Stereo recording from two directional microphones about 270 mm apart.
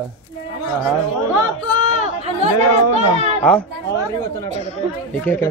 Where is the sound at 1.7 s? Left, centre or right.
Right.